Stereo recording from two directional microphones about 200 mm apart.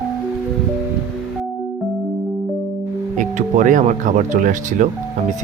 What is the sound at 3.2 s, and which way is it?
Speech, 40° right (ahead or behind).